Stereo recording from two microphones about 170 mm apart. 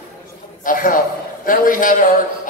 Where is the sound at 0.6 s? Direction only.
55° left (ahead or behind).